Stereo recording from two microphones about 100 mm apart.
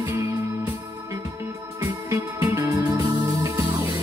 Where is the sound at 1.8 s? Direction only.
30° right (ahead or behind).